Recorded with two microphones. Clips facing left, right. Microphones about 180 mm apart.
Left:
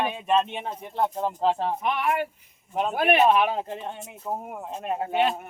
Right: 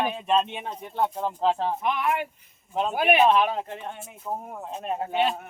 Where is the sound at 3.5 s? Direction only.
25° left (ahead or behind).